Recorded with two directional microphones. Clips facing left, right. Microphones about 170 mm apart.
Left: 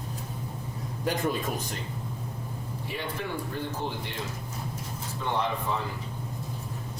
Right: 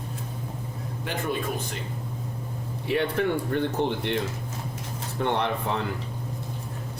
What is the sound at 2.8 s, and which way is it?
Speech, 70° right (ahead or behind).